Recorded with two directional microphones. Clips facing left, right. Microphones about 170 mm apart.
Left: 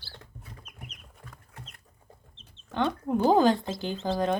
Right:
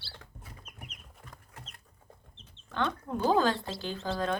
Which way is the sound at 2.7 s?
15° left (ahead or behind).